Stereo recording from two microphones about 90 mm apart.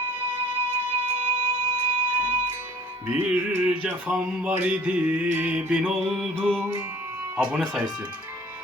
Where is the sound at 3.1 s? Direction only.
15° right (ahead or behind).